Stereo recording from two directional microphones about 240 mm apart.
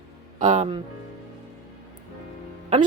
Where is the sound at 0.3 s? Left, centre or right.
Right.